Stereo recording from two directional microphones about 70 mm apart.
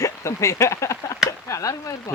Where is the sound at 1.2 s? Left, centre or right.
Left.